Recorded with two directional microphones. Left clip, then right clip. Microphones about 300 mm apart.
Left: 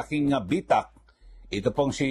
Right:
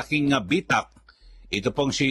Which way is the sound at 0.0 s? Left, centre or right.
Right.